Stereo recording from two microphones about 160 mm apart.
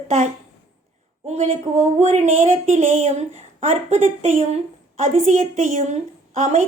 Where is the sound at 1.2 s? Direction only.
45° right (ahead or behind).